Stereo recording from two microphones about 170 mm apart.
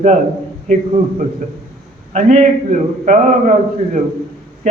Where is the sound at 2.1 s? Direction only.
45° right (ahead or behind).